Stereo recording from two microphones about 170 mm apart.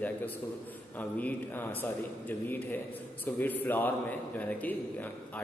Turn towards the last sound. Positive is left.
turn(degrees=10)  # may be behind; listen again after turning